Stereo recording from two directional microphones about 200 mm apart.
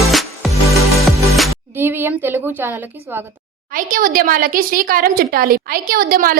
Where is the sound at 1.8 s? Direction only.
10° right (ahead or behind).